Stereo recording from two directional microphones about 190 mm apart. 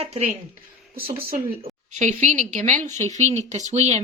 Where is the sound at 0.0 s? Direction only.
30° right (ahead or behind).